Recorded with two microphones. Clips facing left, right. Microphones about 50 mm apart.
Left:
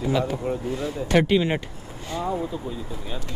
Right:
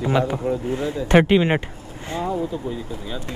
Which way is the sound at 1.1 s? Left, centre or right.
Right.